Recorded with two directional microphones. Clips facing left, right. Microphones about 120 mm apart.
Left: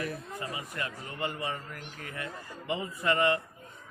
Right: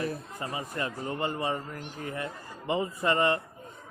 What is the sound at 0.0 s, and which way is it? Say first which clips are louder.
A man's voice: right 3 dB; 35° right (ahead or behind).